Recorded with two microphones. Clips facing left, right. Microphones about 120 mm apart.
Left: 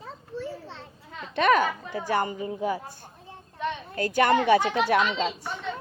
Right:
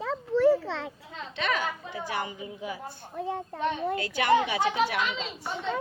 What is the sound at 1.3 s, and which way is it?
A woman's voice, 50° left (ahead or behind).